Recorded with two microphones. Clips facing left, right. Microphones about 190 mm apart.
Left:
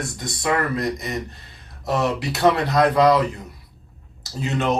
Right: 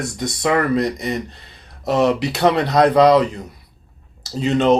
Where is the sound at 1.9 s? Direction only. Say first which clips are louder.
Right 5 dB; 20° right (ahead or behind).